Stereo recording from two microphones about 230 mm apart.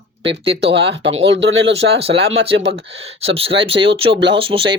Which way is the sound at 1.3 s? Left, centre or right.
Right.